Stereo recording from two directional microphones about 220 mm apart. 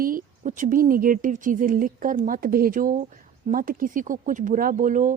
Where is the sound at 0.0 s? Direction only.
35° right (ahead or behind).